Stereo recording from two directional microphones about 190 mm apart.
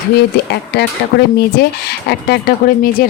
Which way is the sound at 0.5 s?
60° left (ahead or behind).